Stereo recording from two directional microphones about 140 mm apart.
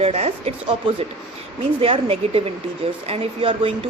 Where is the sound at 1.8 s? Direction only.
45° right (ahead or behind).